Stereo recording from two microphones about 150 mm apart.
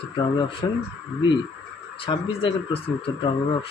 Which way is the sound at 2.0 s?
35° left (ahead or behind).